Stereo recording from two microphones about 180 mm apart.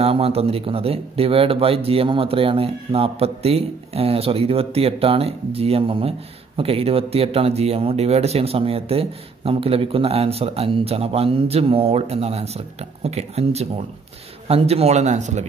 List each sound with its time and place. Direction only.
0.0 s speech: 35° right (ahead or behind)